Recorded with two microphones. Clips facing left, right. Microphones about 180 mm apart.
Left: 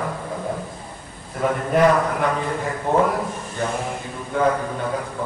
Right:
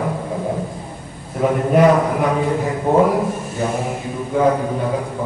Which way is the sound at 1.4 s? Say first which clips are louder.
Right 4 dB; 10° right (ahead or behind).